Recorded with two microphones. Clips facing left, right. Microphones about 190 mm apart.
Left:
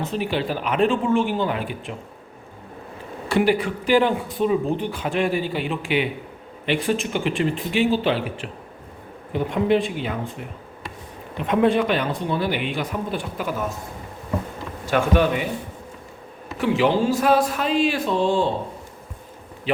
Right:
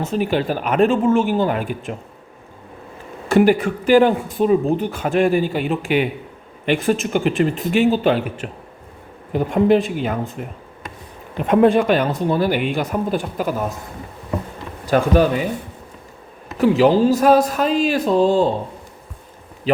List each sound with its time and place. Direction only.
0.0 s speech: 45° right (ahead or behind)
3.2 s speech: 45° right (ahead or behind)
11.4 s speech: 45° right (ahead or behind)
14.8 s speech: 35° right (ahead or behind)
16.6 s a man's voice: 40° right (ahead or behind)
19.7 s a man's voice: 40° right (ahead or behind)